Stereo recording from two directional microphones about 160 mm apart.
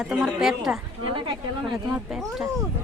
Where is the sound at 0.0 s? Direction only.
5° right (ahead or behind).